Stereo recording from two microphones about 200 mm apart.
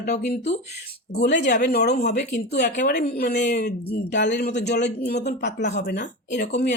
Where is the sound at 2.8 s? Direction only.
50° left (ahead or behind).